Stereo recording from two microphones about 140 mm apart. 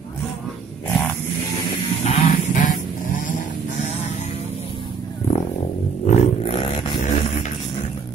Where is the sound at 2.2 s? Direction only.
70° left (ahead or behind).